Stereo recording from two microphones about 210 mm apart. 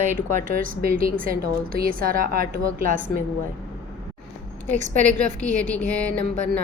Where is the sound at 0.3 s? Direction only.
40° right (ahead or behind).